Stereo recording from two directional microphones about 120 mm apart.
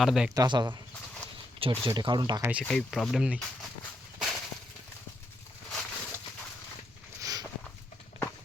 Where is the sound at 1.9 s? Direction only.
40° right (ahead or behind).